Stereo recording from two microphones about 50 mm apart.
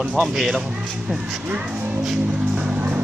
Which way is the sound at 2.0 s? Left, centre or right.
Centre.